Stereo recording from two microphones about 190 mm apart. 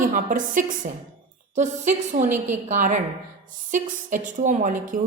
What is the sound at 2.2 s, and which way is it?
Speech, 10° right (ahead or behind).